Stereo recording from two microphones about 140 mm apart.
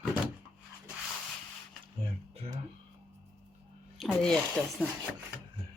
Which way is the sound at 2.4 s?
45° right (ahead or behind).